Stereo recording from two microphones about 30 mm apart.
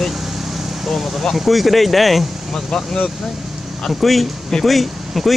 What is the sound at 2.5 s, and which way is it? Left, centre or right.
Speech, centre.